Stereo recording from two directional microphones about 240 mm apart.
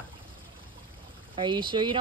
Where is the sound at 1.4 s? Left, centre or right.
Centre.